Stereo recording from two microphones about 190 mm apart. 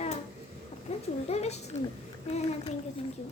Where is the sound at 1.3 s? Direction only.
35° left (ahead or behind).